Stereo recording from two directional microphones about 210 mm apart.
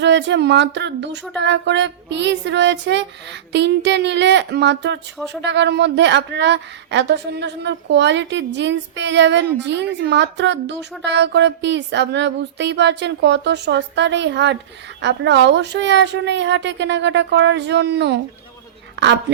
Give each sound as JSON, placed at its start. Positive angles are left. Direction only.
{"t": 0.0, "sound": "a woman's voice", "side_deg": -55}